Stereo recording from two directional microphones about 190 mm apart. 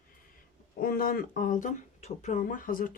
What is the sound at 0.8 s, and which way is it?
Speech, 50° left (ahead or behind).